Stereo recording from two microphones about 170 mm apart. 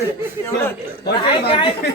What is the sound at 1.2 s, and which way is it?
Speech, 30° left (ahead or behind).